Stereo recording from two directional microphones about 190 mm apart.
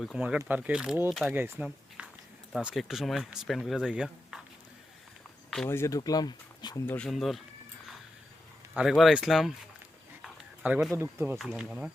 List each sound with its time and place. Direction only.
0.0 s speech: 5° right (ahead or behind)
1.4 s speech: 10° right (ahead or behind)
5.6 s speech: 15° left (ahead or behind)
6.8 s speech: 5° left (ahead or behind)
8.7 s speech: centre (ahead or behind)
10.2 s dog: 5° right (ahead or behind)
10.9 s speech: 15° right (ahead or behind)
11.3 s speech: centre (ahead or behind)